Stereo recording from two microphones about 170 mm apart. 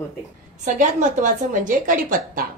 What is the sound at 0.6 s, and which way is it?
A woman's voice, 50° right (ahead or behind).